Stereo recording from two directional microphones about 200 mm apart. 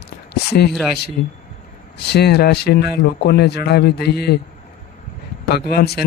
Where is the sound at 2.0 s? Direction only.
55° left (ahead or behind).